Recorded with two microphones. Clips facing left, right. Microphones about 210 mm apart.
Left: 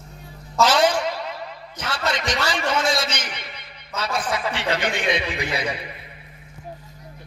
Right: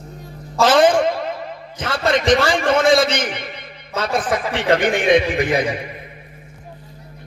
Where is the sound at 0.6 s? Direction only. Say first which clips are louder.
Right 5 dB; 50° right (ahead or behind).